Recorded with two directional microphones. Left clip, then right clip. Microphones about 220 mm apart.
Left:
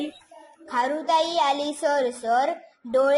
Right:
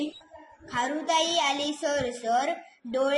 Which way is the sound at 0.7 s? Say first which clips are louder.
Left 4 dB; 45° left (ahead or behind).